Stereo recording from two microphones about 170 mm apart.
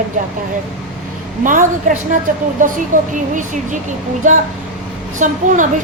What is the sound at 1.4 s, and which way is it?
A woman's voice, 50° right (ahead or behind).